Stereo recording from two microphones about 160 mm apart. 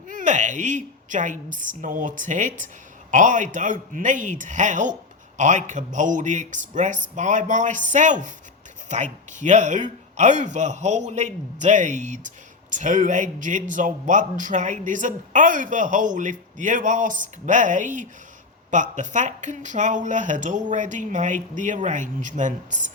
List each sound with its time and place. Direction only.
0.1 s speech: 50° right (ahead or behind)